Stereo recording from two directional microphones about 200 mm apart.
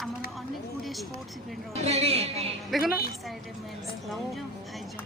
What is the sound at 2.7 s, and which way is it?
Speech, centre (ahead or behind).